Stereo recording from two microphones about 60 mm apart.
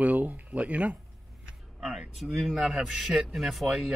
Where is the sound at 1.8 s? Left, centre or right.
Centre.